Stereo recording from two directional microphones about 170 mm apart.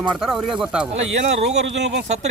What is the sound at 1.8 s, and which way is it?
Speech, 90° right.